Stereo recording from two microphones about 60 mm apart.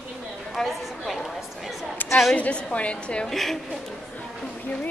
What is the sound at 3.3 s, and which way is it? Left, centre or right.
Speech, centre.